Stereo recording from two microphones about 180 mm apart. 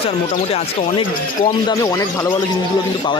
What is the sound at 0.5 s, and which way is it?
Speech, 30° left (ahead or behind).